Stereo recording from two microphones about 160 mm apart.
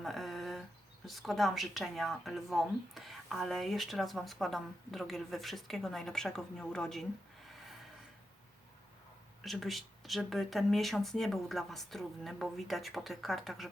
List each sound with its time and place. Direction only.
0.0 s a sound: centre (ahead or behind)
1.0 s speech: centre (ahead or behind)
9.4 s speech: centre (ahead or behind)